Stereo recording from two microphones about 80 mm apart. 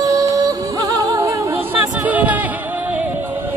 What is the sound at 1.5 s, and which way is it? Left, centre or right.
Music, right.